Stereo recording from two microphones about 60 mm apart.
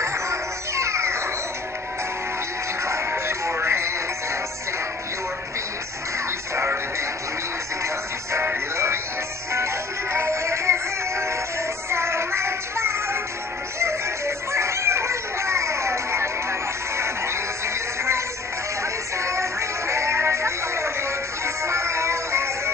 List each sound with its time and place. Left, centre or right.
0.0 s music: right
2.8 s music: right
6.1 s music: right
7.8 s music: right